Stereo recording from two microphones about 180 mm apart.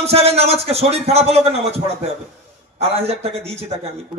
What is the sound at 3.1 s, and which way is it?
Speech, 35° right (ahead or behind).